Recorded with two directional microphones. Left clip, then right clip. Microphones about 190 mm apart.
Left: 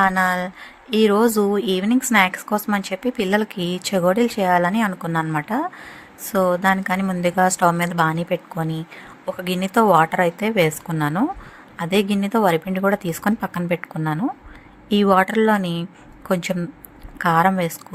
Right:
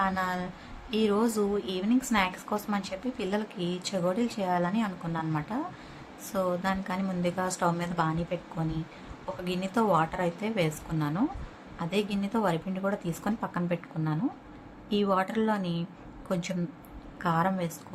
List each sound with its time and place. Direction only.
0.0 s a woman's voice: 50° left (ahead or behind)